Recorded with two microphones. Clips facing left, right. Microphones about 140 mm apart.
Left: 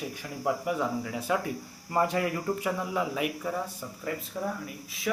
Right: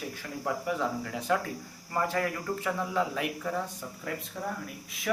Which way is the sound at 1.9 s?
20° left (ahead or behind).